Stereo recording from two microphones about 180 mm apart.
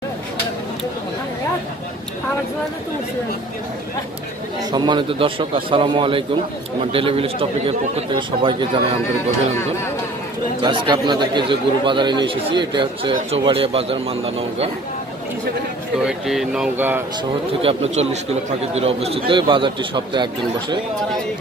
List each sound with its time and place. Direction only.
4.7 s speech: 25° right (ahead or behind)
10.6 s speech: 25° right (ahead or behind)
16.0 s speech: 5° right (ahead or behind)
17.6 s speech: 30° right (ahead or behind)